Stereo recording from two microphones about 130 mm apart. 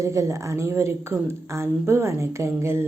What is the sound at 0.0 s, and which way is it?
A woman's voice, 20° right (ahead or behind).